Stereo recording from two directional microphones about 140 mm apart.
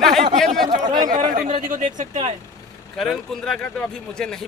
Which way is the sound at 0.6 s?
30° right (ahead or behind).